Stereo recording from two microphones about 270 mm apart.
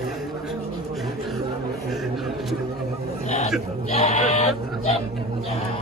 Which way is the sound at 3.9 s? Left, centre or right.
Left.